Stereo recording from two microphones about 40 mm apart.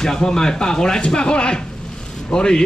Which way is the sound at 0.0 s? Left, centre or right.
Centre.